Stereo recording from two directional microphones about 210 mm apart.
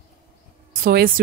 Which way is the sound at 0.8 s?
45° right (ahead or behind).